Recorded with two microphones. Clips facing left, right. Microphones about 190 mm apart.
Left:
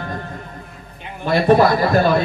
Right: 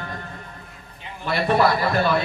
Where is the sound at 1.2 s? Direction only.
40° left (ahead or behind).